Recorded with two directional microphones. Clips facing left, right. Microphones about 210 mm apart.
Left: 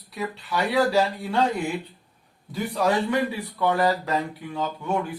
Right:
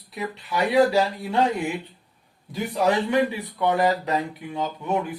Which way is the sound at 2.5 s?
20° right (ahead or behind).